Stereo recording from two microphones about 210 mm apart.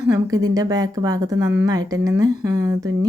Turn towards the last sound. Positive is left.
turn(degrees=-15)  # may be behind; listen again after turning